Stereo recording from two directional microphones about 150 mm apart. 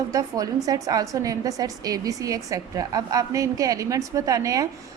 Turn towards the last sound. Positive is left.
turn(degrees=-20)  # may be behind; listen again after turning